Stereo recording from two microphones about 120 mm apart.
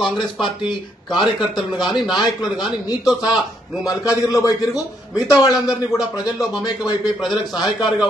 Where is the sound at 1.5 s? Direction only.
Centre (ahead or behind).